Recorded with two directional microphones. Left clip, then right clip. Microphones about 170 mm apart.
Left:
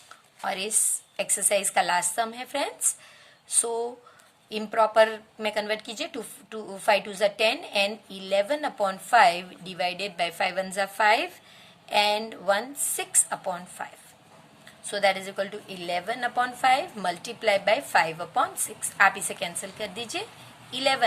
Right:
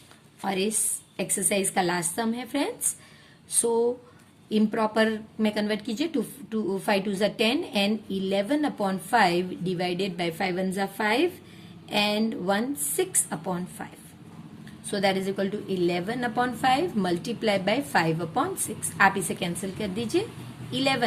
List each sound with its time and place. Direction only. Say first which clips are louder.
0.4 s a woman's voice: right 1 dB; 30° left (ahead or behind)
14.8 s a woman's voice: left 1 dB; 20° left (ahead or behind)